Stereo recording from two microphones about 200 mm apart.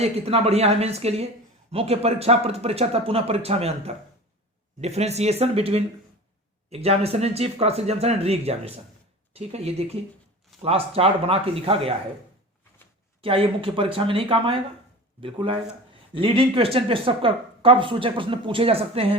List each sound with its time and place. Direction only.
0.0 s speech: 30° right (ahead or behind)
13.2 s speech: 30° right (ahead or behind)